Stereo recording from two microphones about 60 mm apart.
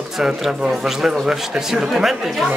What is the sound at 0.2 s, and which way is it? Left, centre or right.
Speech, centre.